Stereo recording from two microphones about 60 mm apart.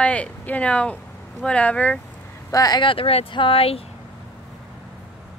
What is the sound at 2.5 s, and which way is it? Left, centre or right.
Speech, left.